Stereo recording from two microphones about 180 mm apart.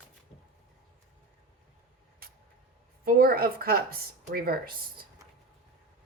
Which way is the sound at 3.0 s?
55° right (ahead or behind).